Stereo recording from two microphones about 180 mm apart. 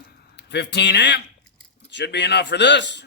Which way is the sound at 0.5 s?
70° left (ahead or behind).